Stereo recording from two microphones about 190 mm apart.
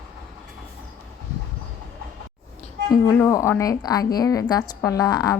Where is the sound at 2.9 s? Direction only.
10° left (ahead or behind).